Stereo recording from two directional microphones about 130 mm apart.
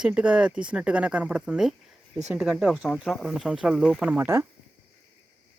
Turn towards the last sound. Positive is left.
turn(degrees=-15)  # may be behind; listen again after turning